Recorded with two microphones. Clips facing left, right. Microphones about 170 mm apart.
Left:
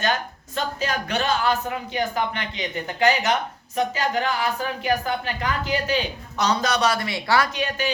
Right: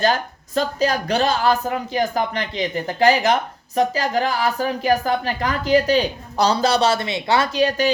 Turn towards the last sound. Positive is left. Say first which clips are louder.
# right 8 dB
turn(degrees=-35)  # may be behind; listen again after turning